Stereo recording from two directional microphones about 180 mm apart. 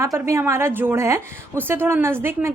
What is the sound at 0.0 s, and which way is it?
A woman's voice, 15° right (ahead or behind).